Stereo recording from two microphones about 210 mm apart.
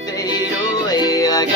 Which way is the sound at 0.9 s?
15° left (ahead or behind).